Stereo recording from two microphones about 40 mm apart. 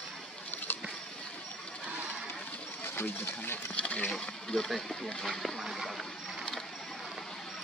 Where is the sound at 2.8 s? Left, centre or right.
Left.